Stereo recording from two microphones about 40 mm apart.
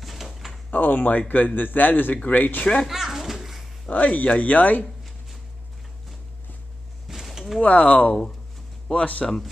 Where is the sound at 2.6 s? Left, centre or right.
Left.